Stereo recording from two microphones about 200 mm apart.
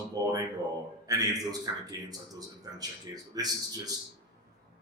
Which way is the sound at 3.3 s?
20° right (ahead or behind).